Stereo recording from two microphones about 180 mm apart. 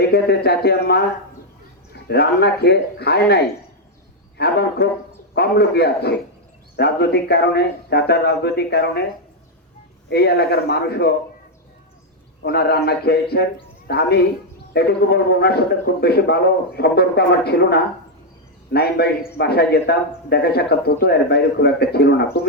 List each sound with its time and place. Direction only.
0.0 s a man's voice: 65° left (ahead or behind)
2.0 s a man's voice: 65° left (ahead or behind)
10.1 s a man's voice: 65° left (ahead or behind)
12.4 s a man's voice: 65° left (ahead or behind)